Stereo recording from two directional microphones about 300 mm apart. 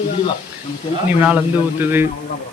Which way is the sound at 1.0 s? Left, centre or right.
Centre.